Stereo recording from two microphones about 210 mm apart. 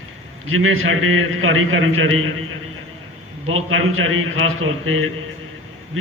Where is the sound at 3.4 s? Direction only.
80° right.